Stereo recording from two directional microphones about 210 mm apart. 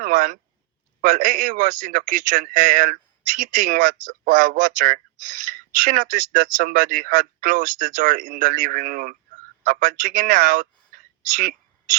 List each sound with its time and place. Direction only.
0.0 s speech: 40° right (ahead or behind)